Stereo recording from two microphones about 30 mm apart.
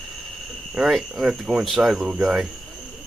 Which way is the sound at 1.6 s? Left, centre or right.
Centre.